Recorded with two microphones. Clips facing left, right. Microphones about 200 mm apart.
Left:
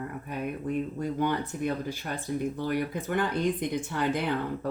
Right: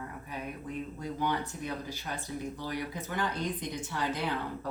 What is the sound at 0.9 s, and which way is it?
Speech, 55° left (ahead or behind).